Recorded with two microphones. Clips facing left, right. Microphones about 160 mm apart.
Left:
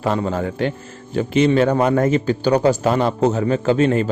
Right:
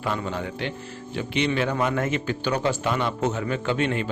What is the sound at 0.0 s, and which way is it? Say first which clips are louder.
A man's voice: left 8 dB; 40° left (ahead or behind).